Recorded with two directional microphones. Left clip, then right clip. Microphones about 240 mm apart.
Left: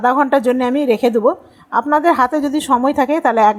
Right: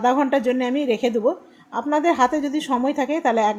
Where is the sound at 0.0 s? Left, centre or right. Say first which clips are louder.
Left 5 dB; centre.